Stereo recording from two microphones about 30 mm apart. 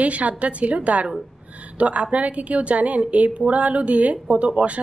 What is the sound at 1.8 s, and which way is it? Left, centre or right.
A woman's voice, right.